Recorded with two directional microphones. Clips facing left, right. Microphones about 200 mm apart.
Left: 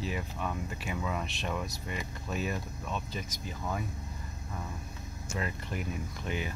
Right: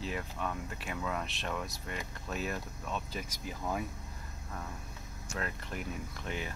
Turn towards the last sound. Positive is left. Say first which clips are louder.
# left 3 dB
turn(degrees=5)  # may be behind; listen again after turning